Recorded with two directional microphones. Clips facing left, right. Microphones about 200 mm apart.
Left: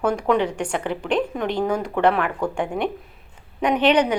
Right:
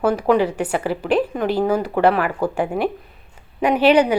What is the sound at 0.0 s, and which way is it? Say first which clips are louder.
A woman's voice: right 3 dB; 5° right (ahead or behind).